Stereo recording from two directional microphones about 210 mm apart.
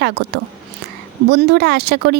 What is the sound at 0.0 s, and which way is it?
Speech, 50° right (ahead or behind).